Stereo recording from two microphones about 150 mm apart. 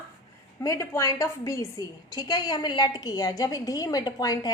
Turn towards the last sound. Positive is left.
turn(degrees=25)  # may be behind; listen again after turning